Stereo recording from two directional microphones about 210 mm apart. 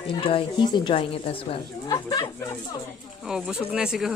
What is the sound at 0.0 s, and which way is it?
Speech, 25° left (ahead or behind).